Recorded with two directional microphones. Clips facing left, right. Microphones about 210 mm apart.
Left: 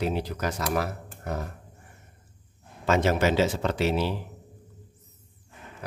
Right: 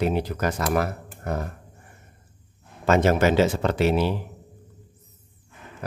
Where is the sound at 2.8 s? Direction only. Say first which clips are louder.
Right 4 dB; 50° right (ahead or behind).